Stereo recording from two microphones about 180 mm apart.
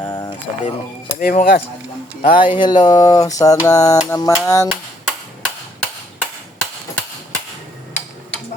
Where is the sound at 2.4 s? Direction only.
25° left (ahead or behind).